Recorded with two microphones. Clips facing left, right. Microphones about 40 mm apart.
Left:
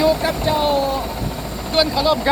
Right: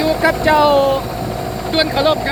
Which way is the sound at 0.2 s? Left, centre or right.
Right.